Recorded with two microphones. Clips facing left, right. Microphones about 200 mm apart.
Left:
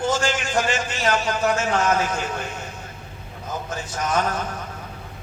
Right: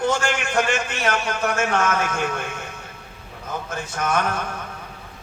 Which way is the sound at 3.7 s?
60° right (ahead or behind).